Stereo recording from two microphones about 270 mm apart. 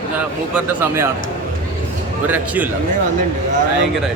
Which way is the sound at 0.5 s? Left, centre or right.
Centre.